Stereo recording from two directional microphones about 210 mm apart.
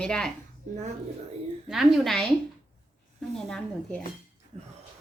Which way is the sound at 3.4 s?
5° left (ahead or behind).